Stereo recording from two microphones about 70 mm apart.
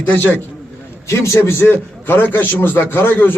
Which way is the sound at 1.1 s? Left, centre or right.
Left.